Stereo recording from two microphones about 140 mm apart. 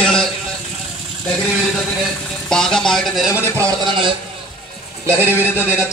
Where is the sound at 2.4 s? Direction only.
5° left (ahead or behind).